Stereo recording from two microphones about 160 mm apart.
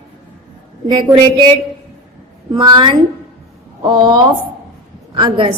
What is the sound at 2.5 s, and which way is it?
A woman's voice, 30° right (ahead or behind).